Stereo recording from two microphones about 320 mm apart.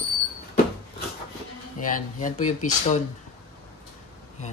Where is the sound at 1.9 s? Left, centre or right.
Left.